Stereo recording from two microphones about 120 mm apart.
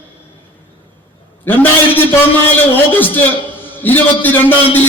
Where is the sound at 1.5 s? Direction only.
15° left (ahead or behind).